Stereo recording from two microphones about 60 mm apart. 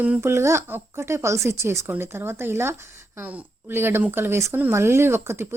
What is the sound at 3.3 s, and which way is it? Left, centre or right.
Speech, right.